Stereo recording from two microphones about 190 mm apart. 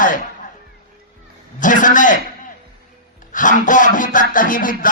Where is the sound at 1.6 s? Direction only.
45° left (ahead or behind).